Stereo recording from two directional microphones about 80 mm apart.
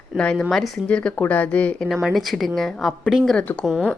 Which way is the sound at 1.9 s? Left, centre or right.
Centre.